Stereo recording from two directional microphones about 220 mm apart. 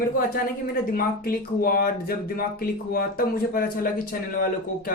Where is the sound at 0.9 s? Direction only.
40° left (ahead or behind).